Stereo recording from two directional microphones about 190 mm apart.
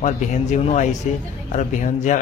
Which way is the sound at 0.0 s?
40° left (ahead or behind).